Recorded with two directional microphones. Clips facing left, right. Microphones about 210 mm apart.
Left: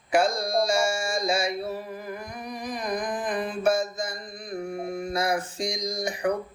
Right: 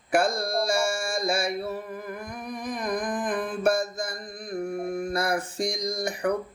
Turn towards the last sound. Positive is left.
turn(degrees=-55)  # may be behind; listen again after turning